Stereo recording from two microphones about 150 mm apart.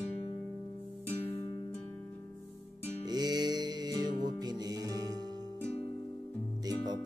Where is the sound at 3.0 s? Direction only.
25° right (ahead or behind).